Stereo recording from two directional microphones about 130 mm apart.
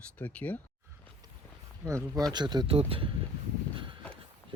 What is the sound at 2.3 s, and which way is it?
Speech, 35° right (ahead or behind).